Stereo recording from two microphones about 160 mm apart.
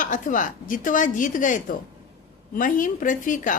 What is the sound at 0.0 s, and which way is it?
Speech, 55° left (ahead or behind).